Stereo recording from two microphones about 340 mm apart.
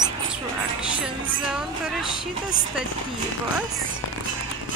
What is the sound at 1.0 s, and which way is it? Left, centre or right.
Speech, centre.